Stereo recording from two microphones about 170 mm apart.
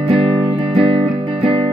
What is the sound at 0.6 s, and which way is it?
Music, 35° right (ahead or behind).